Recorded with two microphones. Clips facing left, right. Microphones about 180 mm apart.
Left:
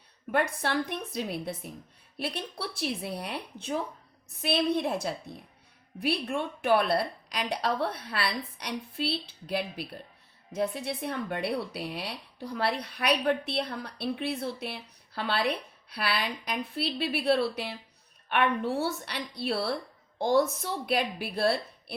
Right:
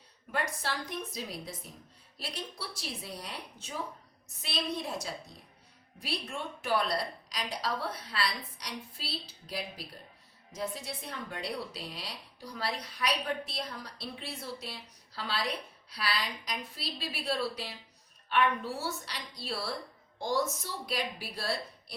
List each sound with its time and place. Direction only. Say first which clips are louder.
0.3 s speech: left 7 dB; 60° left (ahead or behind)